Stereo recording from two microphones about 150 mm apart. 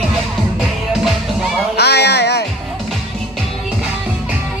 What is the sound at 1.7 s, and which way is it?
Music, 90° left.